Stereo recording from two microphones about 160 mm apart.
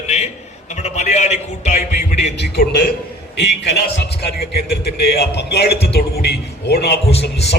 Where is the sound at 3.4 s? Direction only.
90° left.